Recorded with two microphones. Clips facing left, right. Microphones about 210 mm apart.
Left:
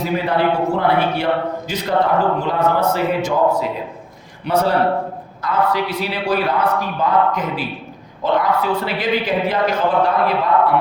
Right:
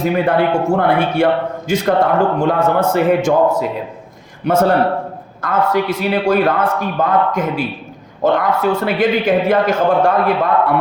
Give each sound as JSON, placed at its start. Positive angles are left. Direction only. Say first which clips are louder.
{"t": 0.0, "sound": "a man's voice", "louder": "right 4 dB", "side_deg": -50}
{"t": 4.4, "sound": "a man's voice", "louder": "right 3 dB", "side_deg": -50}